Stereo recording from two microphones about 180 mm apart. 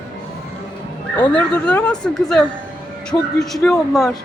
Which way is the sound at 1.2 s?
5° left (ahead or behind).